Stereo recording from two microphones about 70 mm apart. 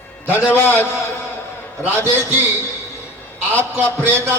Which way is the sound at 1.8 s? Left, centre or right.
Right.